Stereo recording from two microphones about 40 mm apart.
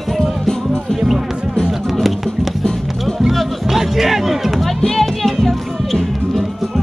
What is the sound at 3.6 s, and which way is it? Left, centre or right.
Music, centre.